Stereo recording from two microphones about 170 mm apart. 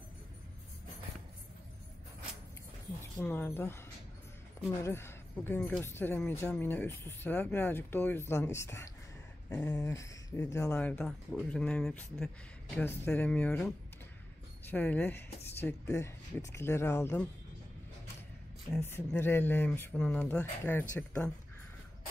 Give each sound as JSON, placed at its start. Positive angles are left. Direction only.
{"t": 3.0, "sound": "a woman's voice", "side_deg": 15}
{"t": 18.7, "sound": "speech", "side_deg": 15}